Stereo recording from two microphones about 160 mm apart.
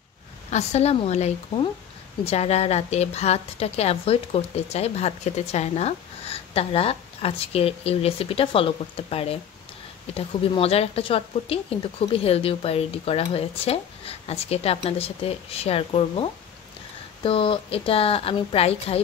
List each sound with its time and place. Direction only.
0.5 s a woman's voice: 45° left (ahead or behind)